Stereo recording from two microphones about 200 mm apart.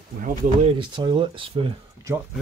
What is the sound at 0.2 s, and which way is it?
Speech, 30° right (ahead or behind).